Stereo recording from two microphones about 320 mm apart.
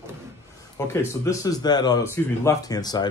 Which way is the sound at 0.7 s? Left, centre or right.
Centre.